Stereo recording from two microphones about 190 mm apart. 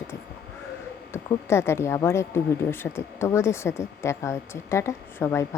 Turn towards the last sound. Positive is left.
turn(degrees=15)  # may be behind; listen again after turning